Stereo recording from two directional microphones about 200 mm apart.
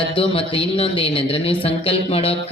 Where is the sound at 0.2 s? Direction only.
25° left (ahead or behind).